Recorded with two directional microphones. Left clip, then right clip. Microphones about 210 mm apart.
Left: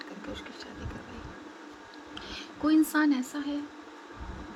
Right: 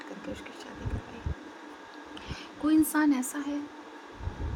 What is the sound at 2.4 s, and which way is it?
Speech, 10° right (ahead or behind).